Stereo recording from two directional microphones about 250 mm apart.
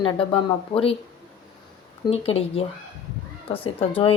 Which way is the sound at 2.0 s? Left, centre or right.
Left.